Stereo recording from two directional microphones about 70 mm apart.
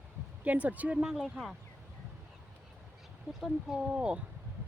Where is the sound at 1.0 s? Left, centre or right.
Centre.